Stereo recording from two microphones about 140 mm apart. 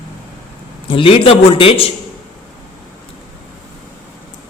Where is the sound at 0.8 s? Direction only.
40° left (ahead or behind).